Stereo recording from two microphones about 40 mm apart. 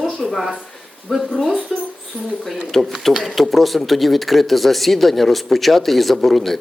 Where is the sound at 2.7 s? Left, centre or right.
Centre.